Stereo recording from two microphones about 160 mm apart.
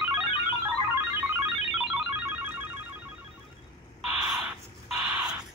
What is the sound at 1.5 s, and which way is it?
Music, centre (ahead or behind).